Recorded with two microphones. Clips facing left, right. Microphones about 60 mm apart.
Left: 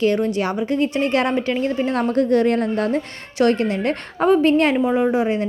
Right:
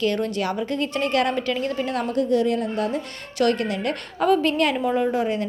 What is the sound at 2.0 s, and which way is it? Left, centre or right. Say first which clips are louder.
A woman's voice: left 4 dB; left.